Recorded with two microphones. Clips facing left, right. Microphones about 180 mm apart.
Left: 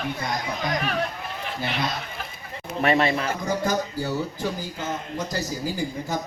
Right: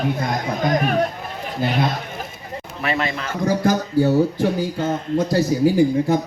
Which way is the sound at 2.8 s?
35° left (ahead or behind).